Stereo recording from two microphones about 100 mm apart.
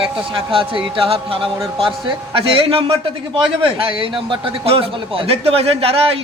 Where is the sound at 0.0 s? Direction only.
60° right (ahead or behind).